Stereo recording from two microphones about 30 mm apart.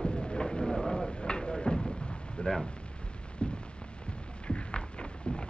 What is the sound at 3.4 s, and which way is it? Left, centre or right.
Rain on surface, left.